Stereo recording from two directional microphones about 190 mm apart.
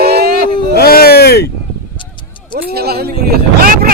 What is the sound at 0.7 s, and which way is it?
Speech, 55° left (ahead or behind).